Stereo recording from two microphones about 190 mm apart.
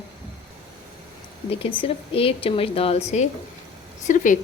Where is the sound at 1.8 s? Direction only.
30° left (ahead or behind).